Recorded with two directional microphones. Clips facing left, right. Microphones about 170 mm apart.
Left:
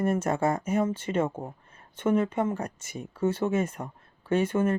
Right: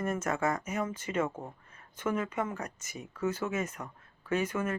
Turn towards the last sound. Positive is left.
turn(degrees=30)  # may be behind; listen again after turning